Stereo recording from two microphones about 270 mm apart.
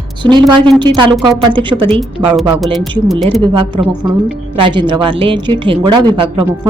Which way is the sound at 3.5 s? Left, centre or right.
Centre.